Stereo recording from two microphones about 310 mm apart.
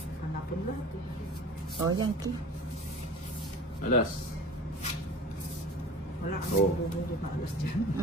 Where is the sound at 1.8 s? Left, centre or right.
Centre.